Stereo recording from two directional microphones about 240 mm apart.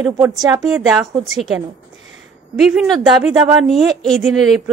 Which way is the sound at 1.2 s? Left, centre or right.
Centre.